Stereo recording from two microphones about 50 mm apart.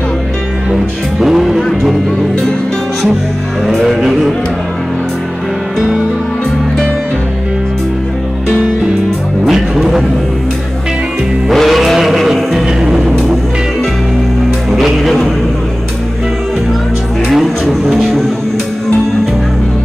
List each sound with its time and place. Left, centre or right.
1.2 s music: centre
1.6 s speech: centre
3.8 s music: centre
9.5 s music: centre
11.4 s music: centre
14.7 s music: centre
17.3 s a sound: centre